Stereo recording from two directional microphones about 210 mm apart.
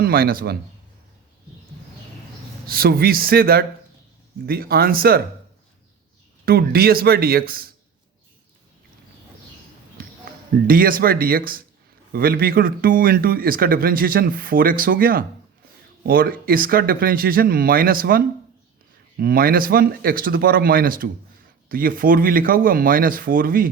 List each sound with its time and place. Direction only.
0.0 s speech: 45° right (ahead or behind)
2.6 s speech: 45° right (ahead or behind)
6.4 s speech: 45° right (ahead or behind)
10.7 s speech: 45° right (ahead or behind)
19.2 s speech: 45° right (ahead or behind)